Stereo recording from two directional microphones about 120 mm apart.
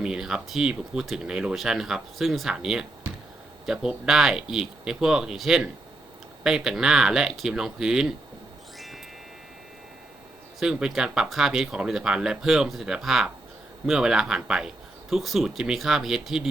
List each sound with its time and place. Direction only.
0.0 s speech: 5° right (ahead or behind)
10.6 s speech: 5° right (ahead or behind)